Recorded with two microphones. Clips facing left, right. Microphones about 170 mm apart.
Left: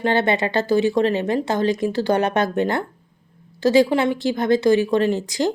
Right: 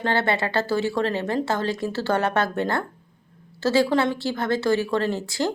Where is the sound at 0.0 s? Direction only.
20° left (ahead or behind).